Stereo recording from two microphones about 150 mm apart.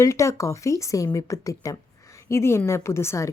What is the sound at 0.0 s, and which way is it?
A woman's voice, 20° left (ahead or behind).